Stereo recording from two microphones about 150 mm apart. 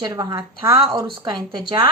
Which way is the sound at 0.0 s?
25° right (ahead or behind).